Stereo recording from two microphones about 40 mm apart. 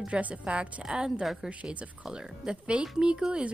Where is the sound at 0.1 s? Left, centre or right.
Right.